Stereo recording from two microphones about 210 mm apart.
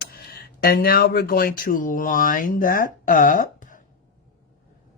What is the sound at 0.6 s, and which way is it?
Speech, 45° left (ahead or behind).